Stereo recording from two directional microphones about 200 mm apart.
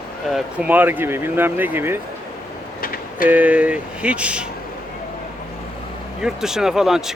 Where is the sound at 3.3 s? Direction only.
10° right (ahead or behind).